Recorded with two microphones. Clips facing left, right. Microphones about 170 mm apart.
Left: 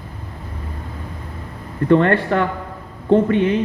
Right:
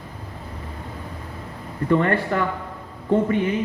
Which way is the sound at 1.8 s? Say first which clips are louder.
Left 5 dB; 65° left (ahead or behind).